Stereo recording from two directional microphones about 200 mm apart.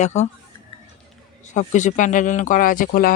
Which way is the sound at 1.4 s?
40° left (ahead or behind).